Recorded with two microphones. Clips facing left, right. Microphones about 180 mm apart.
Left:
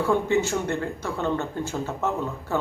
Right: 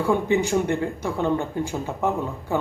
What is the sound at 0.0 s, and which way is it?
Speech, 15° right (ahead or behind).